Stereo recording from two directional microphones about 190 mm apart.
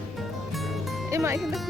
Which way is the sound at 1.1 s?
15° right (ahead or behind).